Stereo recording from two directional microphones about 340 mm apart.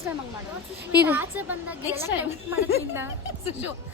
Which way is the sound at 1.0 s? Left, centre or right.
Centre.